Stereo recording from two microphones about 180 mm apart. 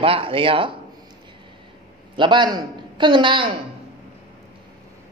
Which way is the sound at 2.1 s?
25° right (ahead or behind).